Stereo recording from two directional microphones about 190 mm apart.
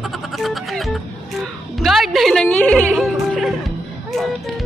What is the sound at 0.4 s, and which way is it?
Music, centre (ahead or behind).